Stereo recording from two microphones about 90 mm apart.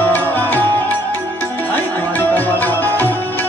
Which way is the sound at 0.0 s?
20° left (ahead or behind).